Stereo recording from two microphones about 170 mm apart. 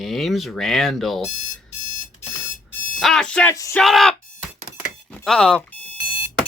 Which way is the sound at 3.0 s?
5° left (ahead or behind).